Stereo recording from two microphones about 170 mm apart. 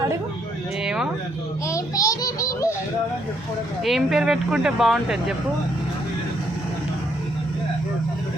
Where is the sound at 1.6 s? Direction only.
20° left (ahead or behind).